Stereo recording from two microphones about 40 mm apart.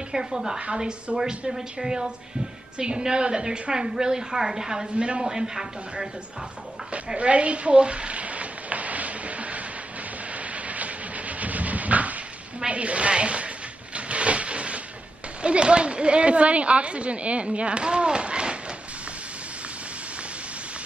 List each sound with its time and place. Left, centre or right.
0.1 s a woman's voice: centre
4.9 s a woman's voice: right
5.2 s speech: centre
7.2 s a sound: right
13.9 s wood: right
15.4 s a woman's voice: right